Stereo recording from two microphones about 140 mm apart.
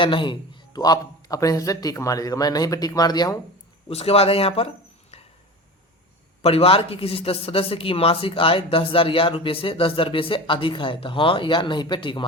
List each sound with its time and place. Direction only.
0.0 s a man's voice: 35° left (ahead or behind)
3.8 s speech: 45° left (ahead or behind)
6.4 s a man's voice: 45° left (ahead or behind)